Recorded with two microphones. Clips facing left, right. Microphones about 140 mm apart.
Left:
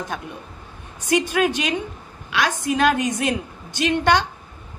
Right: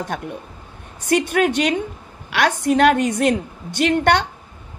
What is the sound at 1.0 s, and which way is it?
A woman's voice, 60° right (ahead or behind).